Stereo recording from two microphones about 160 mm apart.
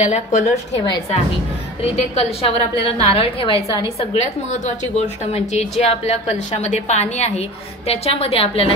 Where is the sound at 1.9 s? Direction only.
40° left (ahead or behind).